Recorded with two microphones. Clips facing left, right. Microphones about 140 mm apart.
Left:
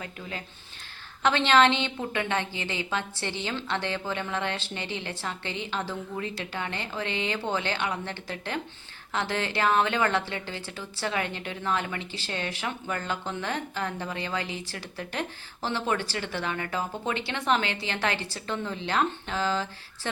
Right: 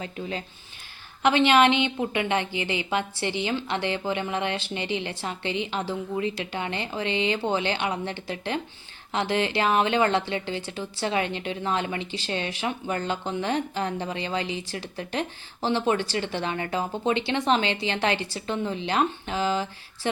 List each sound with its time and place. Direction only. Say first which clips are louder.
0.0 s a woman's voice: right 5 dB; 25° right (ahead or behind)